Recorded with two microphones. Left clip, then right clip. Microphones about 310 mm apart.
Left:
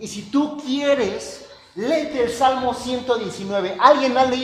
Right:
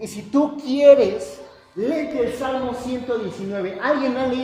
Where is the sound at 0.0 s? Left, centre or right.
Centre.